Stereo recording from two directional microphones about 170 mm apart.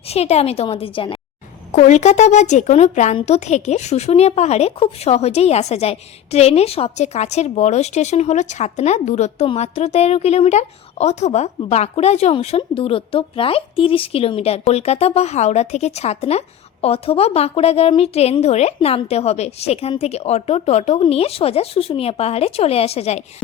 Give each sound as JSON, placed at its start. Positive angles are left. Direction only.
{"t": 0.1, "sound": "a woman's voice", "side_deg": 40}
{"t": 1.7, "sound": "a woman's voice", "side_deg": 45}